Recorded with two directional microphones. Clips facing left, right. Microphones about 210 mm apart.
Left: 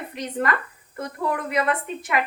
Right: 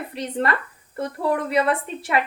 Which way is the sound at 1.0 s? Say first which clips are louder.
Right 4 dB; 30° right (ahead or behind).